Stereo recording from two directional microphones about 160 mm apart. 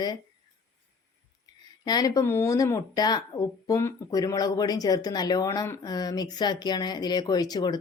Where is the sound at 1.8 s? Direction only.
25° left (ahead or behind).